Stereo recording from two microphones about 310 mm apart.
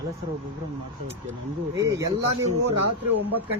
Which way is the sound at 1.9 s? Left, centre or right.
Centre.